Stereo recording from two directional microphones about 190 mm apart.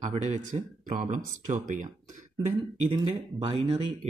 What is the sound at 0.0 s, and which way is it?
Speech, 35° right (ahead or behind).